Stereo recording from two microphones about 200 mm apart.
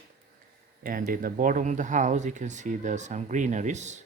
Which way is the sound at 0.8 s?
45° right (ahead or behind).